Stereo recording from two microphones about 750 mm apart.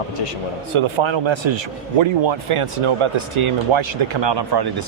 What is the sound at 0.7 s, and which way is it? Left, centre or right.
Speech, right.